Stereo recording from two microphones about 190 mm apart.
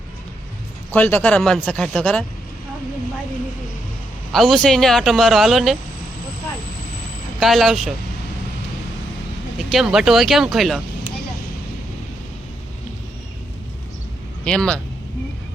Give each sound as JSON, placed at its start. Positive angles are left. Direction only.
{"t": 0.9, "sound": "speech", "side_deg": 10}
{"t": 4.3, "sound": "speech", "side_deg": 0}
{"t": 7.3, "sound": "speech", "side_deg": 0}
{"t": 9.6, "sound": "speech", "side_deg": 0}
{"t": 14.4, "sound": "speech", "side_deg": 5}